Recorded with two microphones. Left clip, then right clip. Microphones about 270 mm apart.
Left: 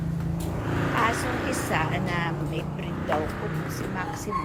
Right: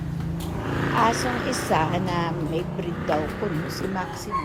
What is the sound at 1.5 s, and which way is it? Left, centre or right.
A woman's voice, centre.